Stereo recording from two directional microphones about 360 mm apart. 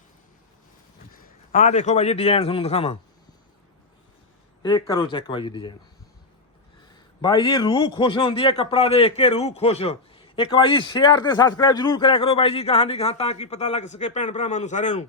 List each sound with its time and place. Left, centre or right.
1.1 s a man's voice: left
4.6 s a man's voice: centre
7.2 s a man's voice: centre